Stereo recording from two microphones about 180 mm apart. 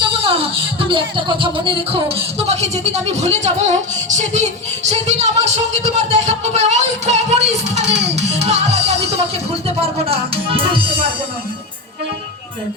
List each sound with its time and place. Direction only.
0.0 s speech: 30° right (ahead or behind)
8.1 s music: 40° right (ahead or behind)
9.8 s speech: 30° right (ahead or behind)